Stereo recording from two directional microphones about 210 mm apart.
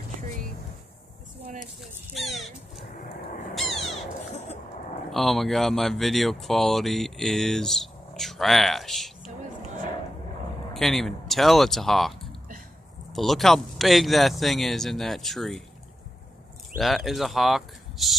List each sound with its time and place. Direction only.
1.8 s speech: centre (ahead or behind)
3.5 s crow: centre (ahead or behind)
5.1 s speech: centre (ahead or behind)
10.7 s speech: centre (ahead or behind)
16.7 s speech: centre (ahead or behind)